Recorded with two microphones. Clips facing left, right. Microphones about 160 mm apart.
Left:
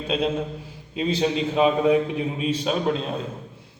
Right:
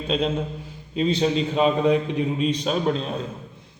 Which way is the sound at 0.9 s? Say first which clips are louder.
Right 2 dB; 10° left (ahead or behind).